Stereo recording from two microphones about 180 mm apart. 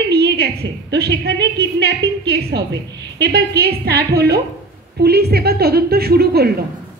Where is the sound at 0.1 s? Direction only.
65° right (ahead or behind).